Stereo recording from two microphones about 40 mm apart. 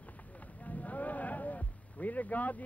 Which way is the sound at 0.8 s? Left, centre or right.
Left.